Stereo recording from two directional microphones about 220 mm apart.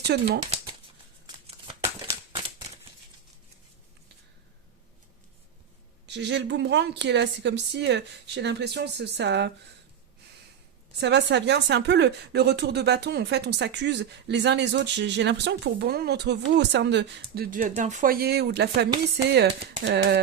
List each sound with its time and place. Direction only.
0.1 s speech: 50° right (ahead or behind)
0.5 s shuffling cards: 25° right (ahead or behind)
6.1 s speech: 55° right (ahead or behind)
11.0 s speech: 50° right (ahead or behind)